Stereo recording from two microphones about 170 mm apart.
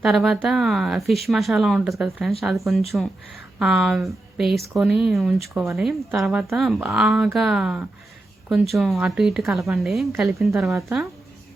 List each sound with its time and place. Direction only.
0.0 s speech: centre (ahead or behind)